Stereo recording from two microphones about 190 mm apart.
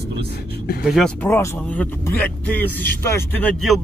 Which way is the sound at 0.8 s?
Centre (ahead or behind).